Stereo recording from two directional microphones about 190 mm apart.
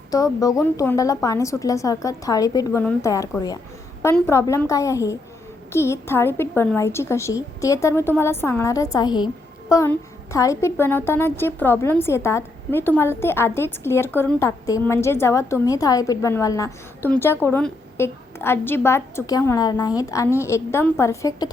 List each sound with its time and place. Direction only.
0.1 s a woman's voice: 20° left (ahead or behind)